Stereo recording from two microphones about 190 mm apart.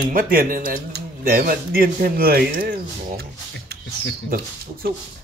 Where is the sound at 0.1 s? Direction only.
50° right (ahead or behind).